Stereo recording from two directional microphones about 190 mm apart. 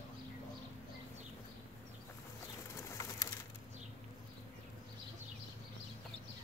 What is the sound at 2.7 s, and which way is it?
Bird, 20° left (ahead or behind).